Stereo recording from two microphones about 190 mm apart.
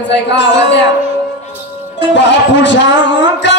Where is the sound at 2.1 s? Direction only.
70° left (ahead or behind).